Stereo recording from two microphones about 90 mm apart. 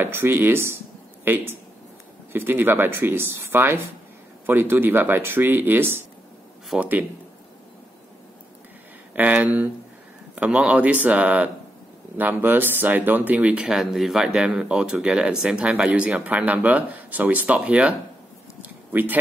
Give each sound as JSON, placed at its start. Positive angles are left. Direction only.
{"t": 0.0, "sound": "speech", "side_deg": -25}
{"t": 9.1, "sound": "speech", "side_deg": -20}
{"t": 18.6, "sound": "a sound", "side_deg": -20}